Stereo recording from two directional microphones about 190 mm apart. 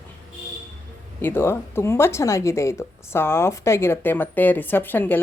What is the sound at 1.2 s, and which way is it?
Speech, 10° left (ahead or behind).